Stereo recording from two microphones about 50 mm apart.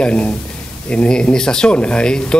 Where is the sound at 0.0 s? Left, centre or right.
Left.